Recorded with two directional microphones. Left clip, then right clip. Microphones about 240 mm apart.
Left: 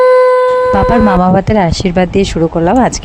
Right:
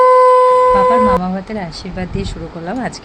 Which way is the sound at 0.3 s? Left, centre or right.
Centre.